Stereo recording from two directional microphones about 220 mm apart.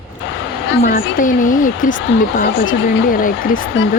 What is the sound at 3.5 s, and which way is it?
Speech, 60° left (ahead or behind).